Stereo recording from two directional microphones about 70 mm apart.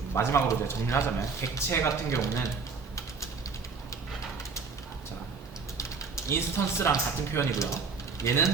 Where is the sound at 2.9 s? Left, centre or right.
Left.